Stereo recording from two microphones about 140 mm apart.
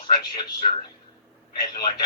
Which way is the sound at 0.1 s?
35° left (ahead or behind).